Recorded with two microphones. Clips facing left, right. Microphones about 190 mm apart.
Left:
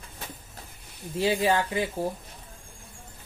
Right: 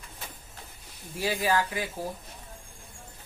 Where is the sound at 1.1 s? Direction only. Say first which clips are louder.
Left 3 dB; 25° left (ahead or behind).